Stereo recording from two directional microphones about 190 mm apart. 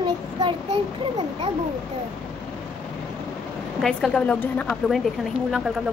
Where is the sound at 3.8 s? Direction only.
5° left (ahead or behind).